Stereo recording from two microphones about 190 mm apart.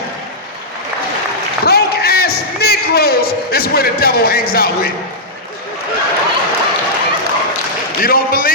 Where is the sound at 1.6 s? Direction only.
55° left (ahead or behind).